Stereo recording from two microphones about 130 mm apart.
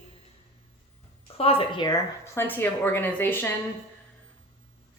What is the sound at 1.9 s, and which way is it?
Speech, 20° left (ahead or behind).